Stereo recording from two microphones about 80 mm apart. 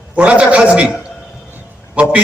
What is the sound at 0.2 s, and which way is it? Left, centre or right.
Speech, centre.